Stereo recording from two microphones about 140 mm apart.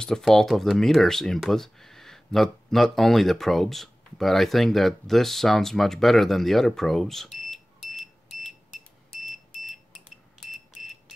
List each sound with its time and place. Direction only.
0.0 s speech: 5° left (ahead or behind)
9.1 s smoke detector: centre (ahead or behind)
10.5 s a sound: centre (ahead or behind)